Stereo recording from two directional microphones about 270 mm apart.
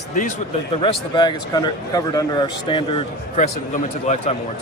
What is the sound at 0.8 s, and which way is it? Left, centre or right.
A man's voice, centre.